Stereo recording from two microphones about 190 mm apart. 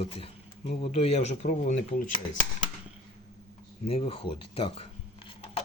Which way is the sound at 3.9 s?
30° left (ahead or behind).